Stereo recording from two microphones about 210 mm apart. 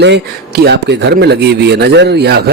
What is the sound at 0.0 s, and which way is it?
Speech, 50° right (ahead or behind).